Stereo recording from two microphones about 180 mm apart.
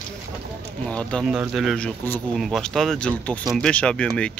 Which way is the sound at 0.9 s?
5° left (ahead or behind).